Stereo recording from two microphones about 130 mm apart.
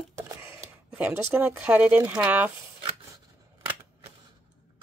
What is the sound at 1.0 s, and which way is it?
Speech, 15° right (ahead or behind).